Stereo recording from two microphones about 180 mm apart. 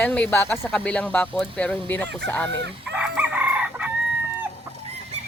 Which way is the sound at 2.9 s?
10° right (ahead or behind).